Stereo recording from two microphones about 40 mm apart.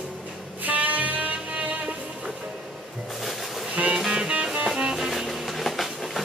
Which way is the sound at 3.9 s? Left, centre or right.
Centre.